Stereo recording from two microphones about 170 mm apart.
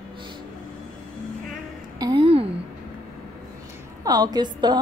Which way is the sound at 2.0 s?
25° right (ahead or behind).